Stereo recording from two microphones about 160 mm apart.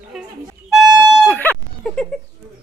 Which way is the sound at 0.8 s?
25° right (ahead or behind).